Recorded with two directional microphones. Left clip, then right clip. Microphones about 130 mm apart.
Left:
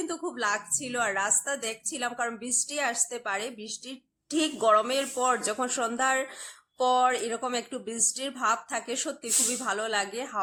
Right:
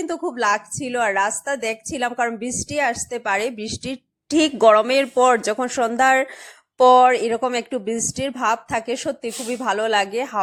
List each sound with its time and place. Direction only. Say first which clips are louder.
0.0 s a woman's voice: right 9 dB; 40° right (ahead or behind)